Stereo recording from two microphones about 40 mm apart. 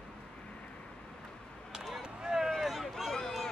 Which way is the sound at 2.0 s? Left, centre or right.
Centre.